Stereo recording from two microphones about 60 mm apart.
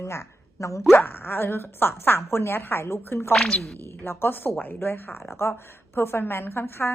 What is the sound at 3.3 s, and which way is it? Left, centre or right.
Speech, centre.